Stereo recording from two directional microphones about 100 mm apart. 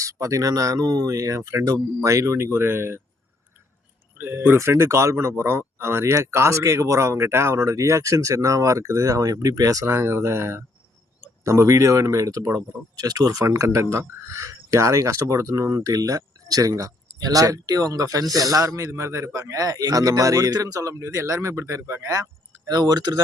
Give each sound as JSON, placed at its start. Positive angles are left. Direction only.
{"t": 0.0, "sound": "speech", "side_deg": -35}
{"t": 4.2, "sound": "a man's voice", "side_deg": -20}
{"t": 9.8, "sound": "a man's voice", "side_deg": -25}